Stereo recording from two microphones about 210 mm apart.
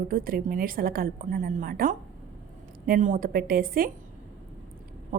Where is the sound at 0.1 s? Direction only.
40° right (ahead or behind).